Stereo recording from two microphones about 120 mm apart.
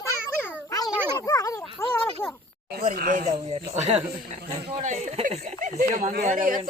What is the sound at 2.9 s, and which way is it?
Speech, 90° right.